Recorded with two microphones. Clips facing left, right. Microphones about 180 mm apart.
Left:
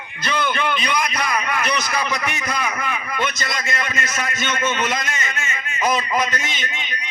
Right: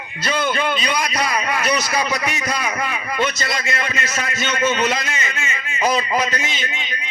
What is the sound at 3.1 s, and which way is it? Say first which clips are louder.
A man's voice: right 5 dB; 30° right (ahead or behind).